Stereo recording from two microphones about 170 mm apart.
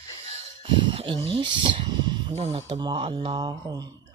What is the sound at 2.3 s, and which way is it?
Speech, 35° right (ahead or behind).